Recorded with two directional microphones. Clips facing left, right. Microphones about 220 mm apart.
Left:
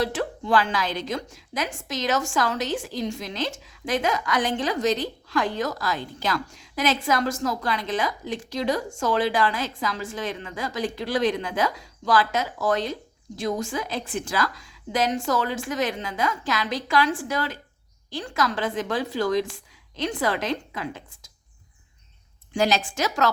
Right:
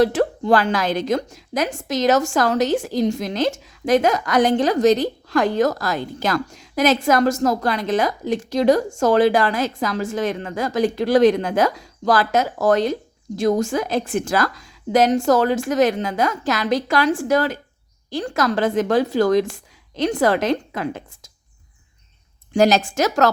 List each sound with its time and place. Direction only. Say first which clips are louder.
0.0 s a woman's voice: right 9 dB; 45° right (ahead or behind)
22.5 s a woman's voice: right 7 dB; 40° right (ahead or behind)